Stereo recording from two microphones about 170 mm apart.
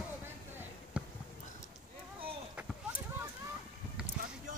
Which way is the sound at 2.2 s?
10° right (ahead or behind).